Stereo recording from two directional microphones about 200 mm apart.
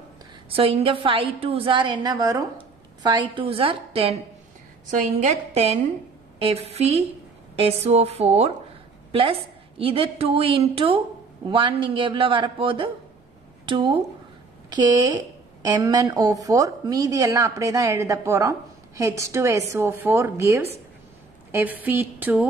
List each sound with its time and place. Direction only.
0.5 s a woman's voice: 30° right (ahead or behind)
5.3 s a woman's voice: 30° right (ahead or behind); by 22.5 s 10° right (ahead or behind)